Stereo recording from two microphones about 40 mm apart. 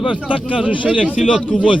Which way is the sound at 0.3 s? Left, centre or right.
Right.